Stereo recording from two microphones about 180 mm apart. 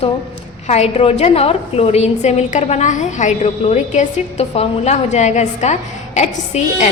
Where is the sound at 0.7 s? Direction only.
40° left (ahead or behind).